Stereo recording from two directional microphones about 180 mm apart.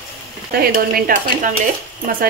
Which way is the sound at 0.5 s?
55° right (ahead or behind).